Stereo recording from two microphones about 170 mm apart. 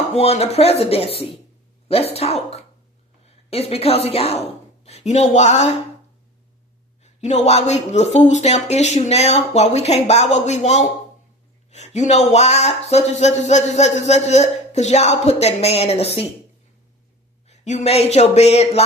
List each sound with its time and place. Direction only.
0.1 s speech: 35° left (ahead or behind)
7.0 s speech: 40° left (ahead or behind)
17.5 s speech: 40° left (ahead or behind)